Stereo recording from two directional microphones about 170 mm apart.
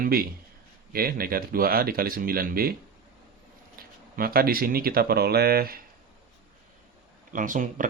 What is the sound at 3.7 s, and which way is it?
Speech, 60° right (ahead or behind).